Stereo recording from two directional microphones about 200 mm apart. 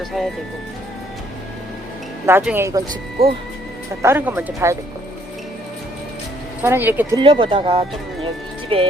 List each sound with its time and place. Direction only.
2.2 s speech: 10° right (ahead or behind)
3.2 s speech: 30° right (ahead or behind)
4.0 s speech: 10° right (ahead or behind)
6.6 s speech: 10° right (ahead or behind)
7.2 s speech: 25° right (ahead or behind)